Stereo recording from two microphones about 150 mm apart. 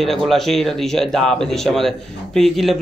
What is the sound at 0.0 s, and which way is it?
Speech, centre (ahead or behind).